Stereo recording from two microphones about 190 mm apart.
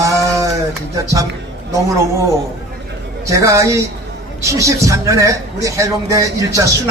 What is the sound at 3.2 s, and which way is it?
Speech, 15° right (ahead or behind).